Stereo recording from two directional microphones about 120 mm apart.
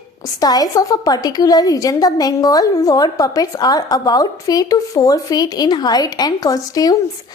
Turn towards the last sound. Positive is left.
turn(degrees=30)  # may be behind; listen again after turning